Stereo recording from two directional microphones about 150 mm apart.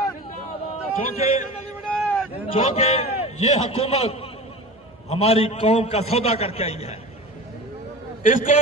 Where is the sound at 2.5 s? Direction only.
45° left (ahead or behind).